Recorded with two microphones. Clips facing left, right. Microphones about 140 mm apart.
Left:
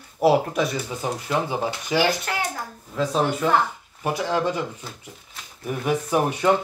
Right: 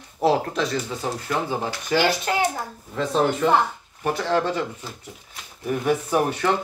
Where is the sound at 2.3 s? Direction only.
20° right (ahead or behind).